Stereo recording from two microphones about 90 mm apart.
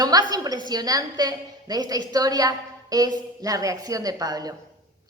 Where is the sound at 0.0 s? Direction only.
45° right (ahead or behind).